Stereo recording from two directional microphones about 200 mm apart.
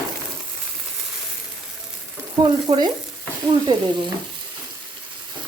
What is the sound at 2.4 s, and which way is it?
Stir, 20° right (ahead or behind).